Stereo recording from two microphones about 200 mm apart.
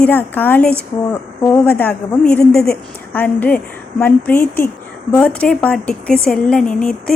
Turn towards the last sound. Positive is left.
turn(degrees=5)  # may be behind; listen again after turning